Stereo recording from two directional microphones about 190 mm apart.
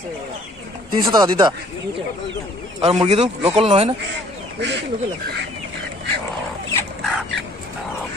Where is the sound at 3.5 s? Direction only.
30° right (ahead or behind).